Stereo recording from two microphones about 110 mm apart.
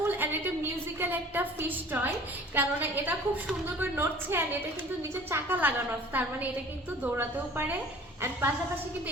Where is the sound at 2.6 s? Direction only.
20° right (ahead or behind).